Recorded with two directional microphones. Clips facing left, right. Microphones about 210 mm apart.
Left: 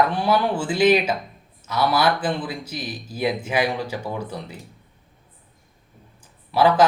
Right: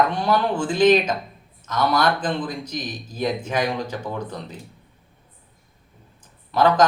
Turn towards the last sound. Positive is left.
turn(degrees=10)  # may be behind; listen again after turning